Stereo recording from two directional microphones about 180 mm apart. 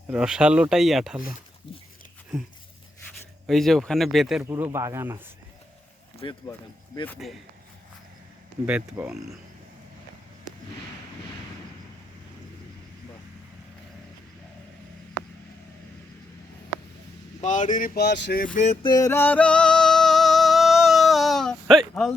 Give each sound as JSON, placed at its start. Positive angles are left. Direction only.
{"t": 0.1, "sound": "speech", "side_deg": -5}
{"t": 3.4, "sound": "speech", "side_deg": 0}
{"t": 4.4, "sound": "speech", "side_deg": -15}
{"t": 6.2, "sound": "speech", "side_deg": 25}
{"t": 7.2, "sound": "speech", "side_deg": 0}
{"t": 8.6, "sound": "speech", "side_deg": -5}
{"t": 17.4, "sound": "speech", "side_deg": 45}
{"t": 18.5, "sound": "a sound", "side_deg": 40}
{"t": 18.9, "sound": "music", "side_deg": 20}